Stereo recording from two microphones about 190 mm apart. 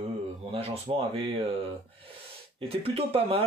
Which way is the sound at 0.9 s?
30° right (ahead or behind).